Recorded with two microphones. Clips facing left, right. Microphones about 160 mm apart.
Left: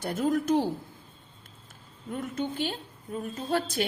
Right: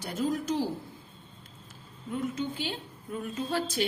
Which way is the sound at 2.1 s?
50° left (ahead or behind).